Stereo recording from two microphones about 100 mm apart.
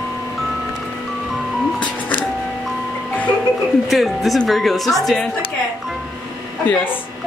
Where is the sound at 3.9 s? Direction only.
Centre (ahead or behind).